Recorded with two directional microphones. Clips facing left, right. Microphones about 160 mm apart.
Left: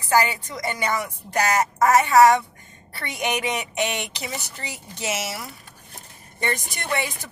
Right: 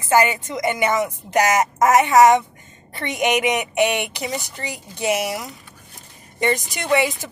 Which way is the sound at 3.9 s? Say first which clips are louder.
Right 6 dB; 60° right (ahead or behind).